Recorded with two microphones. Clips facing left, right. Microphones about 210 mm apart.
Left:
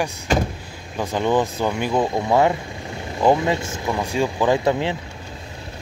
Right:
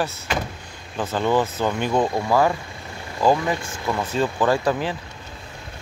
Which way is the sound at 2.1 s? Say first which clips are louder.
Left 2 dB; 20° left (ahead or behind).